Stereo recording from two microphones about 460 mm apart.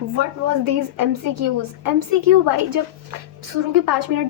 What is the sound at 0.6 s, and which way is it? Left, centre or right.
A woman's voice, right.